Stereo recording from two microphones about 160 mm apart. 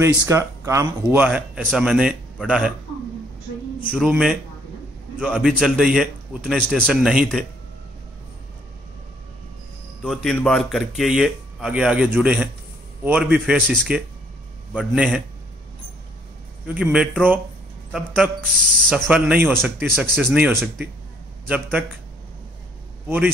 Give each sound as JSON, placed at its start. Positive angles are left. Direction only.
{"t": 0.0, "sound": "speech", "side_deg": -20}
{"t": 3.9, "sound": "speech", "side_deg": -5}
{"t": 5.4, "sound": "speech", "side_deg": -5}
{"t": 10.0, "sound": "speech", "side_deg": 0}
{"t": 16.6, "sound": "speech", "side_deg": -5}
{"t": 19.0, "sound": "speech", "side_deg": -10}
{"t": 23.0, "sound": "a man's voice", "side_deg": -10}